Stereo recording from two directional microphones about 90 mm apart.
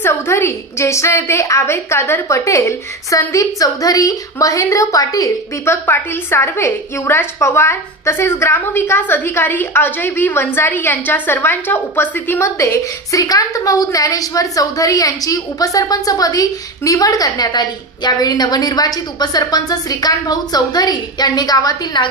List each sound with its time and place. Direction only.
0.0 s a woman's voice: 30° left (ahead or behind)
5.7 s a woman's voice: 25° left (ahead or behind); by 22.0 s 50° left (ahead or behind)